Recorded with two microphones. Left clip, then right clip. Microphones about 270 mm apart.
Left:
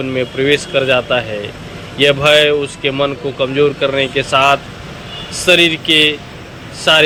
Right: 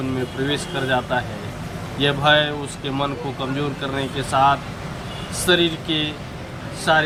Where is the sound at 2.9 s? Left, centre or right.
Centre.